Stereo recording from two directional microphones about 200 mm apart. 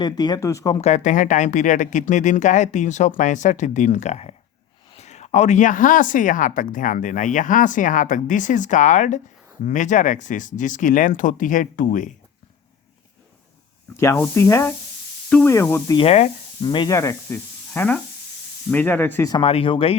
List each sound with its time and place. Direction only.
0.0 s speech: 20° left (ahead or behind)
0.8 s speech: 35° left (ahead or behind)
13.9 s speech: 15° left (ahead or behind)
16.0 s speech: 30° left (ahead or behind)
16.6 s speech: 20° left (ahead or behind)
19.3 s speech: 30° left (ahead or behind)